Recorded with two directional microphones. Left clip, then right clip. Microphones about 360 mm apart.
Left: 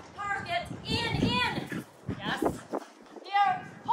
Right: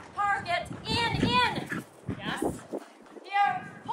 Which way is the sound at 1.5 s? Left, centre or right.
Centre.